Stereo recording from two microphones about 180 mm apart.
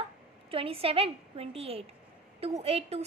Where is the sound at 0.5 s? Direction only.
30° right (ahead or behind).